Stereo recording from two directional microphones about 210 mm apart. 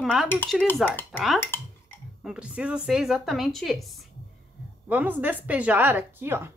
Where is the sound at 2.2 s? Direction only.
5° right (ahead or behind).